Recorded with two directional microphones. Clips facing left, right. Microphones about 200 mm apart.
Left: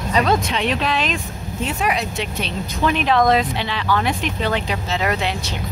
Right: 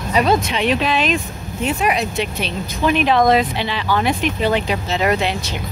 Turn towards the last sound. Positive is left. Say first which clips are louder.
# right 4 dB
turn(degrees=-15)  # may be behind; listen again after turning